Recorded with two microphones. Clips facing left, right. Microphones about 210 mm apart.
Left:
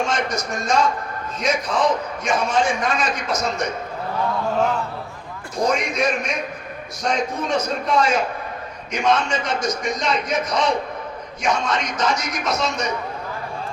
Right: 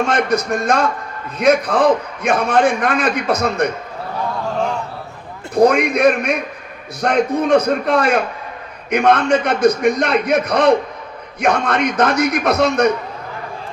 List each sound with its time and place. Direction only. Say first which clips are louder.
0.1 s a man's voice: right 7 dB; 60° right (ahead or behind)
5.5 s a man's voice: right 8 dB; 60° right (ahead or behind)